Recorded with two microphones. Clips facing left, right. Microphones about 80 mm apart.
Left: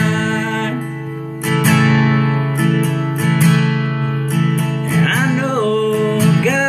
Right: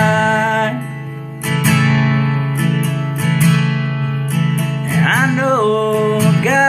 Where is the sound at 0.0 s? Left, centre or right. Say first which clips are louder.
Right 4 dB; right.